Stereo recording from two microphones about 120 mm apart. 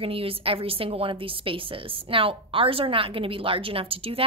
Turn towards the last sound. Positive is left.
turn(degrees=-50)  # may be behind; listen again after turning